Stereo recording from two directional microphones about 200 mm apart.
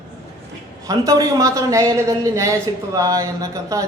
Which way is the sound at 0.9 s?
15° right (ahead or behind).